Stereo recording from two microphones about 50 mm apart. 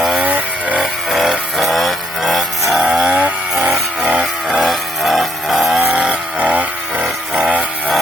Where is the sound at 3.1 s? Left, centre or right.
Right.